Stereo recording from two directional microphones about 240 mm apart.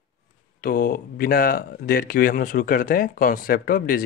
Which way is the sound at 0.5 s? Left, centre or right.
Left.